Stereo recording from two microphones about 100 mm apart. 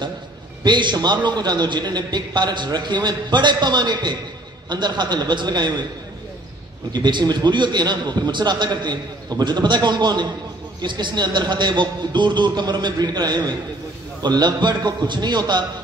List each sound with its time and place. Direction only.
0.7 s a man's voice: 50° right (ahead or behind)
6.9 s a man's voice: 50° right (ahead or behind)